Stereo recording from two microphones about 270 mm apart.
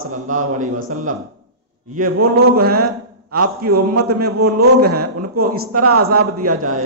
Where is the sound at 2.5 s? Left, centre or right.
Right.